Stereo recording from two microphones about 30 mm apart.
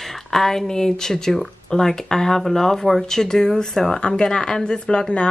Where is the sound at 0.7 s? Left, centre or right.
Left.